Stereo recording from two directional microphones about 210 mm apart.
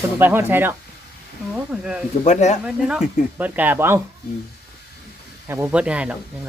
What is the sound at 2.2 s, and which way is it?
Speech, 35° left (ahead or behind).